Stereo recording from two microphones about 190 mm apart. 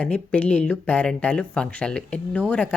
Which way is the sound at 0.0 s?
5° left (ahead or behind).